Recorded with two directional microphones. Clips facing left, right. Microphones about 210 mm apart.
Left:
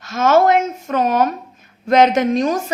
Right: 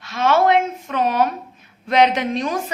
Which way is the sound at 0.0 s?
45° left (ahead or behind).